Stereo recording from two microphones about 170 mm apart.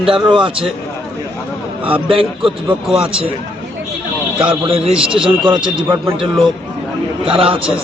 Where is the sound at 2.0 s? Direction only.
30° right (ahead or behind).